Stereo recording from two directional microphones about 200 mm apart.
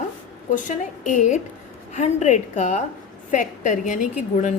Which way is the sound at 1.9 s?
35° left (ahead or behind).